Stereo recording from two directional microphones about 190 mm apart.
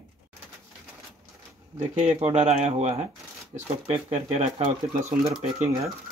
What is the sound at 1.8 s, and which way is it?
Speech, 35° right (ahead or behind).